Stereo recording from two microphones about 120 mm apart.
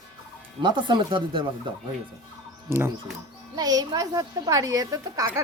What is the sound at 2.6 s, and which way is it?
Speech, 20° right (ahead or behind).